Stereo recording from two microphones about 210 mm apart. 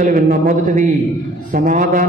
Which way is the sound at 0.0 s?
40° right (ahead or behind).